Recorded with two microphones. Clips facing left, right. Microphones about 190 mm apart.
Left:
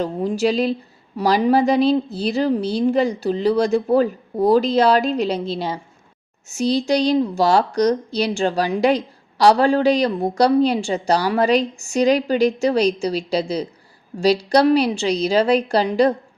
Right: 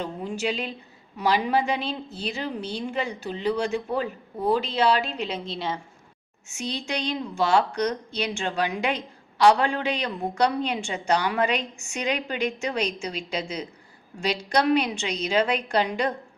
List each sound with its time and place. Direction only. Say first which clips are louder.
0.0 s a woman's voice: left 9 dB; 35° left (ahead or behind)